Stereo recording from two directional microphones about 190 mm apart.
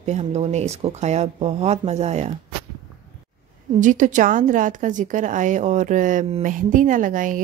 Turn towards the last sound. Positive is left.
turn(degrees=-45)  # may be behind; listen again after turning